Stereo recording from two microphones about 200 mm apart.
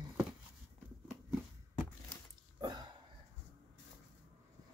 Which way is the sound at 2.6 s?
20° right (ahead or behind).